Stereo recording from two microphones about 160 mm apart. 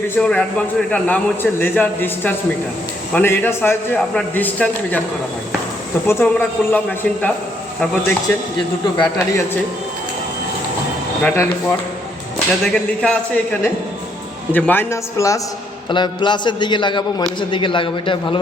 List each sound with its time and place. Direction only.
0.2 s a man's voice: 5° left (ahead or behind)
6.1 s a man's voice: 15° left (ahead or behind)
11.2 s a man's voice: 10° left (ahead or behind)
12.6 s a man's voice: 5° left (ahead or behind)
15.9 s a man's voice: 30° left (ahead or behind)